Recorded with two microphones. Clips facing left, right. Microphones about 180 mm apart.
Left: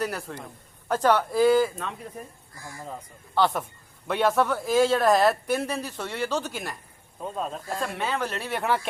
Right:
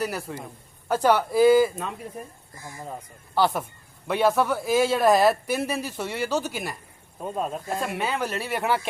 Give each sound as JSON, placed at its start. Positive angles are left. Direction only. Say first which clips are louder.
{"t": 0.0, "sound": "speech", "louder": "right 1 dB", "side_deg": -5}
{"t": 2.6, "sound": "speech", "louder": "right 1 dB", "side_deg": -20}